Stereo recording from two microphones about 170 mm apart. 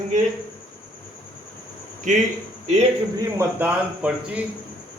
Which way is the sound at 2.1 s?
45° right (ahead or behind).